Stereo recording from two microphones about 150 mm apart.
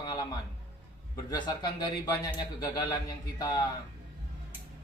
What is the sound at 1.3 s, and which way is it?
Speech, 30° left (ahead or behind).